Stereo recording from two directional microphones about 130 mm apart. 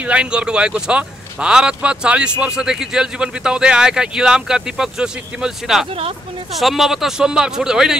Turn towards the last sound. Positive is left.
turn(degrees=-5)  # may be behind; listen again after turning